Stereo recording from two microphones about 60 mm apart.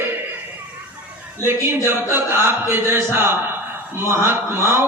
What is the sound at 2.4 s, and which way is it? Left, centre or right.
Mantra, right.